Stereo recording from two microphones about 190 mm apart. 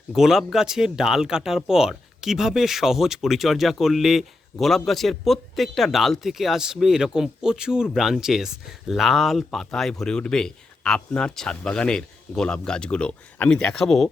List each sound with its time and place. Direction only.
0.1 s speech: centre (ahead or behind)